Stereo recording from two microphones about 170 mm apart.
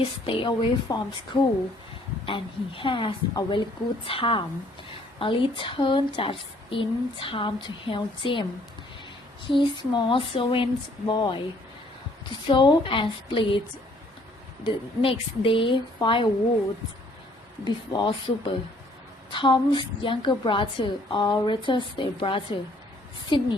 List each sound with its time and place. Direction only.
0.3 s a woman's voice: 30° left (ahead or behind)
9.5 s a woman's voice: 30° left (ahead or behind)
14.6 s a woman's voice: 30° left (ahead or behind)
17.7 s a woman's voice: 30° left (ahead or behind)